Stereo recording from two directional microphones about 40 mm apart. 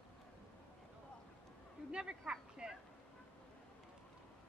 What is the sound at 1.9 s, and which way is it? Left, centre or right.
Speech, right.